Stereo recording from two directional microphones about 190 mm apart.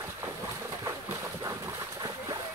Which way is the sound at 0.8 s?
15° right (ahead or behind).